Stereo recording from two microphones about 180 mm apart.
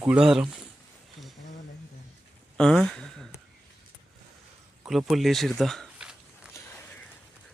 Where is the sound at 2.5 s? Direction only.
5° left (ahead or behind).